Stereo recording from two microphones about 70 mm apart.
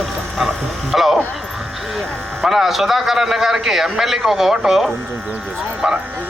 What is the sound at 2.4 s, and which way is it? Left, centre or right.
A man's voice, centre.